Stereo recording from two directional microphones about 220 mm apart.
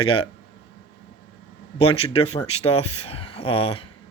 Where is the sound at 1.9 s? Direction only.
25° left (ahead or behind).